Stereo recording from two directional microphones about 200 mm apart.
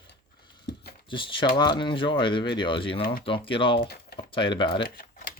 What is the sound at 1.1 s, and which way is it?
Speech, 25° left (ahead or behind).